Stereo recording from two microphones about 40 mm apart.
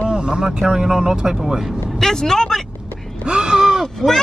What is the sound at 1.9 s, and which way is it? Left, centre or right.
Speech, centre.